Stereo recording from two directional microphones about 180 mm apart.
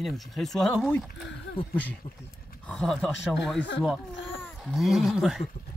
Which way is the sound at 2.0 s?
30° left (ahead or behind).